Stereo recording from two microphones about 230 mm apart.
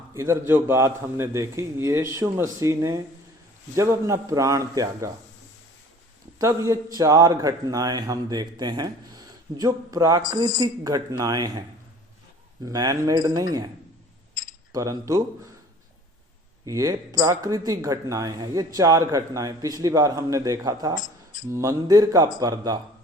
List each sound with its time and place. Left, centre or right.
0.1 s a man's voice: centre
6.4 s a man's voice: centre
12.6 s a man's voice: centre
14.7 s a man's voice: centre
16.6 s a man's voice: centre